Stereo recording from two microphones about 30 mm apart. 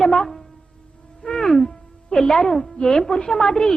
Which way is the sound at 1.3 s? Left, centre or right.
Centre.